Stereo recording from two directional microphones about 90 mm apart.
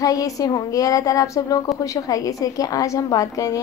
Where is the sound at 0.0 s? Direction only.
40° left (ahead or behind).